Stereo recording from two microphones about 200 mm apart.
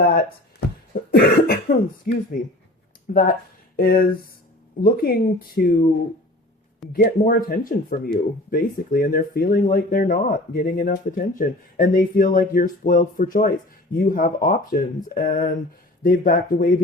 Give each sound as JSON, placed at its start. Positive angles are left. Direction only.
{"t": 0.9, "sound": "speech", "side_deg": 45}
{"t": 6.9, "sound": "speech", "side_deg": 45}